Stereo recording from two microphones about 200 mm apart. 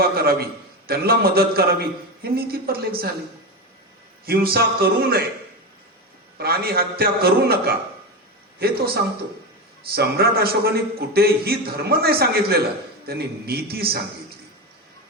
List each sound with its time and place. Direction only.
0.2 s a man's voice: 50° right (ahead or behind)
4.3 s a man's voice: 50° right (ahead or behind)
6.3 s a man's voice: 50° right (ahead or behind)